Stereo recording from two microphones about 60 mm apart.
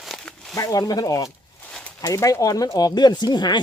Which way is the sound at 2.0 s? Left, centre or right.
Left.